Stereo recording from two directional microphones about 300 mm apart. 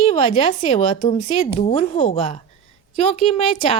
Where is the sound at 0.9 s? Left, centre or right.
Centre.